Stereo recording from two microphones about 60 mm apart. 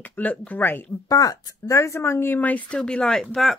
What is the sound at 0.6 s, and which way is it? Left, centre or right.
Speech, left.